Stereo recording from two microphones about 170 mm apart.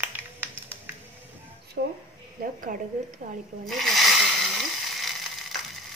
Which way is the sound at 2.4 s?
55° right (ahead or behind).